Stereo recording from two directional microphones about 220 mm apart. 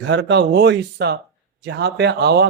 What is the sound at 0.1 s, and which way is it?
Speech, 55° right (ahead or behind).